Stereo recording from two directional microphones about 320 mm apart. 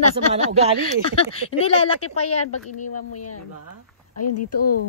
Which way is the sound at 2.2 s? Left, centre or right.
Left.